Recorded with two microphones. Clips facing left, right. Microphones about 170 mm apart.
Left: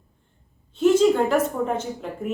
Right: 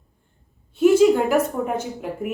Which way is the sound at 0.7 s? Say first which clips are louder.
Right 3 dB; 10° right (ahead or behind).